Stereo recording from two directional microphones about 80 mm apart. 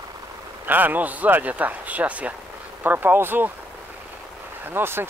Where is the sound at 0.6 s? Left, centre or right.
Right.